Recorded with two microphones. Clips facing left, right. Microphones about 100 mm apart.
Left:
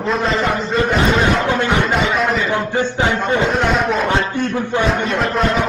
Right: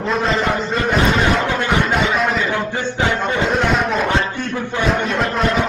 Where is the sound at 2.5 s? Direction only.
20° left (ahead or behind).